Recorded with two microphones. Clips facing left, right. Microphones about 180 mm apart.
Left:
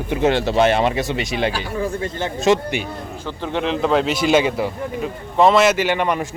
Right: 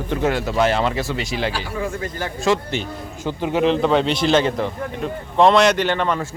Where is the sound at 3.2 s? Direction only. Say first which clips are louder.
Right 4 dB; 15° right (ahead or behind).